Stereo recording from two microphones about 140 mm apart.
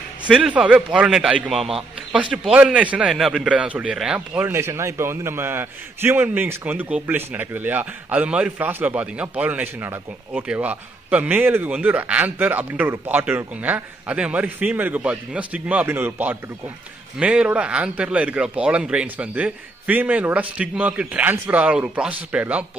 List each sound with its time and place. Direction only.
0.3 s a man's voice: 5° right (ahead or behind)